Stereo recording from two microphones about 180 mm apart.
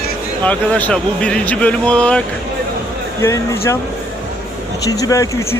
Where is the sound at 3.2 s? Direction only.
15° left (ahead or behind).